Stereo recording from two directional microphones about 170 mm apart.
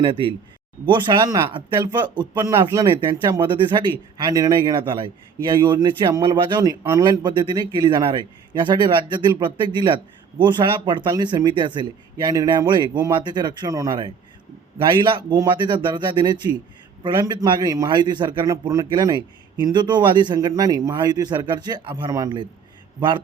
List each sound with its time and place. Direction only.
0.0 s speech: 30° right (ahead or behind)